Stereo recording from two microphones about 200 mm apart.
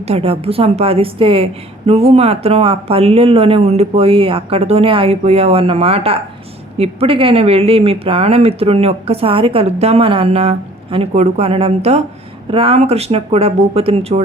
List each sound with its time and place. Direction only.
0.1 s speech: 30° right (ahead or behind)